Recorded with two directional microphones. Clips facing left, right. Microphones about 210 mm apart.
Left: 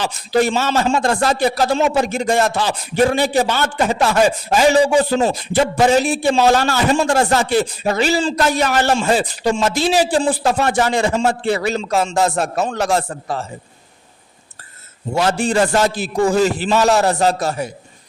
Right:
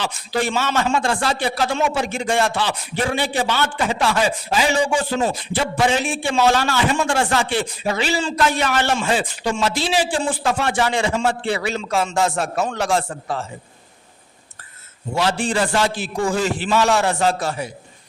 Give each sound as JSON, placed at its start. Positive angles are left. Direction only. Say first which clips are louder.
{"t": 0.0, "sound": "a man's voice", "louder": "left 6 dB", "side_deg": 40}
{"t": 15.1, "sound": "a man's voice", "louder": "left 4 dB", "side_deg": 45}